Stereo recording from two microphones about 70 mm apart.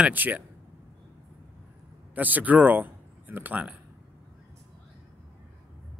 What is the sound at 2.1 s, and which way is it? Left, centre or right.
Speech, right.